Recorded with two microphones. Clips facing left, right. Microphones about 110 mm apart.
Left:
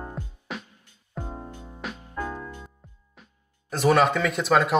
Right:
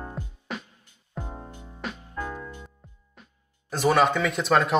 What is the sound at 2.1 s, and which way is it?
Music, 20° left (ahead or behind).